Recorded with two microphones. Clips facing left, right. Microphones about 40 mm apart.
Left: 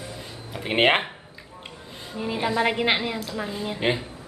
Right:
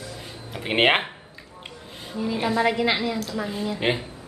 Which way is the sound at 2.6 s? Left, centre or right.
Left.